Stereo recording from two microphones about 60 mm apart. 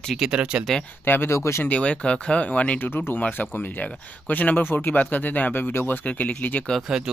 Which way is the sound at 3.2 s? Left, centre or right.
Left.